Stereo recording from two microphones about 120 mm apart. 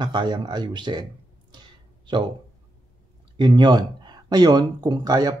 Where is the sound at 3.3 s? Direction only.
40° right (ahead or behind).